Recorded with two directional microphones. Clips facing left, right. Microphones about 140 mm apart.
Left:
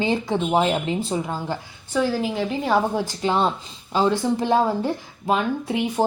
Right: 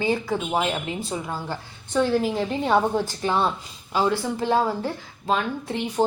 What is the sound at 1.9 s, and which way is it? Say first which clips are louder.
Speech: right 1 dB; 5° left (ahead or behind).